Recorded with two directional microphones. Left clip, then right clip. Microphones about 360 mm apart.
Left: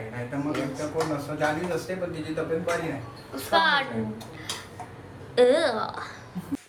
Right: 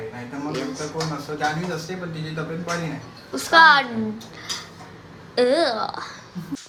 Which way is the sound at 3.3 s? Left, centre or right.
Centre.